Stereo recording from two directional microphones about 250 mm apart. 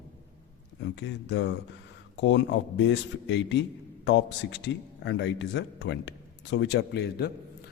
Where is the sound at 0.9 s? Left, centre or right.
Left.